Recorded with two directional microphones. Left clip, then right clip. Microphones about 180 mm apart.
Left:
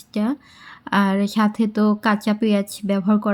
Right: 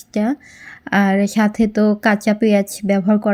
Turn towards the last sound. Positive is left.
turn(degrees=-15)  # may be behind; listen again after turning